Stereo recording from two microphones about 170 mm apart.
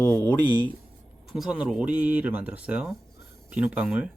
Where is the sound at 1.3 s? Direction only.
5° right (ahead or behind).